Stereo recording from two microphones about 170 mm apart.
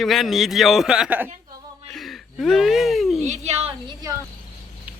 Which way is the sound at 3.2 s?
40° right (ahead or behind).